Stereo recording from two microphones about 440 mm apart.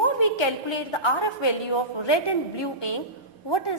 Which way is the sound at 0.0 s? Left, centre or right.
Left.